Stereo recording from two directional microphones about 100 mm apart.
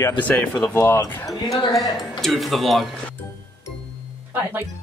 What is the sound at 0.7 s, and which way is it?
Speech, 25° left (ahead or behind).